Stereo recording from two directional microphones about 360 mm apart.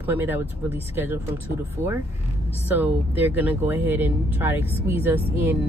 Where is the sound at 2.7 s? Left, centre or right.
Centre.